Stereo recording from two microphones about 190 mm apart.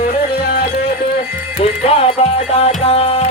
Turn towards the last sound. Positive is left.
turn(degrees=30)  # may be behind; listen again after turning